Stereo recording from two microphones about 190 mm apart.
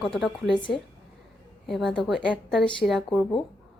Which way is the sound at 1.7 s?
Centre (ahead or behind).